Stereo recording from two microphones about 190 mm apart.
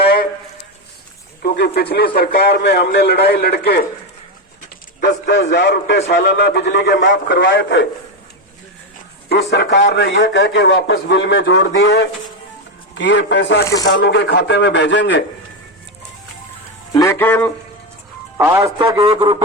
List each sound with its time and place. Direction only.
0.0 s a sound: 55° left (ahead or behind)
1.4 s a man's voice: 55° left (ahead or behind)
4.9 s a man's voice: 60° left (ahead or behind)
9.3 s a man's voice: 65° left (ahead or behind)
12.9 s a man's voice: 70° left (ahead or behind)
13.7 s speech: 20° left (ahead or behind)
14.0 s a man's voice: 60° left (ahead or behind)
16.9 s speech: 15° left (ahead or behind)
18.3 s a man's voice: 10° right (ahead or behind)
18.8 s speech: 25° right (ahead or behind)